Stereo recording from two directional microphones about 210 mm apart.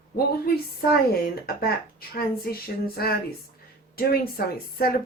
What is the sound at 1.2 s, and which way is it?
Speech, 45° left (ahead or behind).